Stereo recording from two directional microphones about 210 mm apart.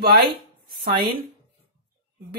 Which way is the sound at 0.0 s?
45° right (ahead or behind).